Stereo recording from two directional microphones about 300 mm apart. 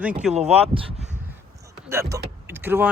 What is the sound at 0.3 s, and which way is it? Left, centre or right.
Speech, centre.